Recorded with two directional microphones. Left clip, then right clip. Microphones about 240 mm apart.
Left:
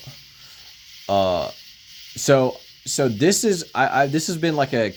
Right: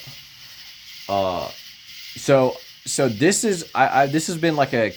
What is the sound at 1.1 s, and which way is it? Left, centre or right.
Speech, left.